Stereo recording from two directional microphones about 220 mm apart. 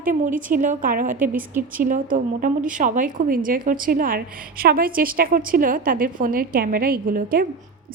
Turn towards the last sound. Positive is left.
turn(degrees=-40)  # may be behind; listen again after turning